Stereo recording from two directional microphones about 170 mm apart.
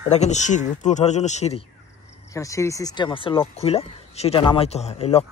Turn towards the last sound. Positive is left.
turn(degrees=35)  # may be behind; listen again after turning